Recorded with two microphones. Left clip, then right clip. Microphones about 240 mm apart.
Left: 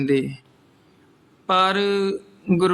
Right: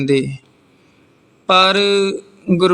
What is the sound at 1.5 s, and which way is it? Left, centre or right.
Speech, centre.